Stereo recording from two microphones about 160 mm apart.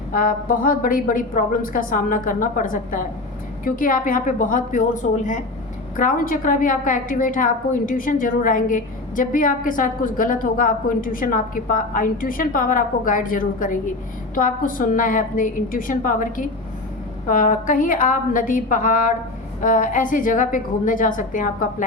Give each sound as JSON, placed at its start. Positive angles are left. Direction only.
{"t": 0.1, "sound": "a woman's voice", "side_deg": 60}